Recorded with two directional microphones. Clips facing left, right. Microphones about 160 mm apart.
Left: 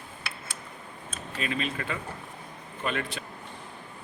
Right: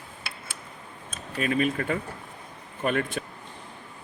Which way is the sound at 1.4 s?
50° right (ahead or behind).